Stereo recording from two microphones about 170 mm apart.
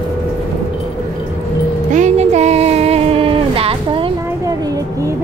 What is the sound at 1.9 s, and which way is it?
Music, 45° right (ahead or behind).